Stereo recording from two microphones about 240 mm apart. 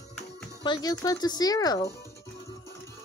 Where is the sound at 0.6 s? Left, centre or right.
Centre.